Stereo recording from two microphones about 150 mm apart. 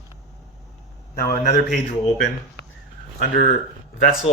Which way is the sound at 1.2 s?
90° left.